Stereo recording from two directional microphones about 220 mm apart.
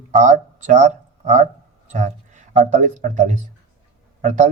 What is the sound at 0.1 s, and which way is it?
Speech, 35° right (ahead or behind).